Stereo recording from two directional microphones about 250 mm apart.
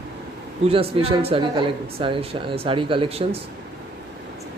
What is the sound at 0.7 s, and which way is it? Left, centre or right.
Speech, right.